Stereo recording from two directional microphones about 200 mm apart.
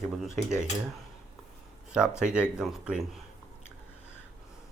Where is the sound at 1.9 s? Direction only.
5° right (ahead or behind).